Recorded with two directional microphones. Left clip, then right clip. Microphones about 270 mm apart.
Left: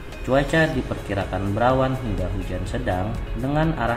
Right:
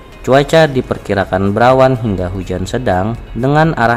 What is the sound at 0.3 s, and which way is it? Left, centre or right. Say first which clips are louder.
Speech: right 11 dB; right.